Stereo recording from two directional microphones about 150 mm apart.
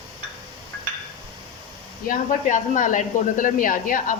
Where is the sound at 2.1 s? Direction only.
55° left (ahead or behind).